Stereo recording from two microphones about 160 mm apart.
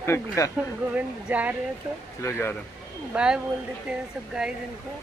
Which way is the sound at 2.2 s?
15° left (ahead or behind).